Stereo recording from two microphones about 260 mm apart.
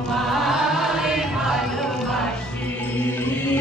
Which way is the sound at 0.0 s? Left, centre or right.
Centre.